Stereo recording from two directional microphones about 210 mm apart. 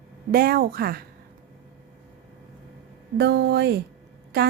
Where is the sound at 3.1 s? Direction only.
55° right (ahead or behind).